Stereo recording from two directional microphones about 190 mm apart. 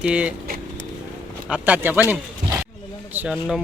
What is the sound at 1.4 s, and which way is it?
Speech, 5° right (ahead or behind).